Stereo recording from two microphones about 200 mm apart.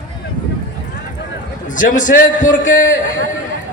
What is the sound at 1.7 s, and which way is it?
Speech, 40° left (ahead or behind).